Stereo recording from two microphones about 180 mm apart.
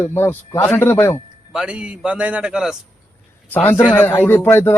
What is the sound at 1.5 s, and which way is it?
Speech, 5° right (ahead or behind).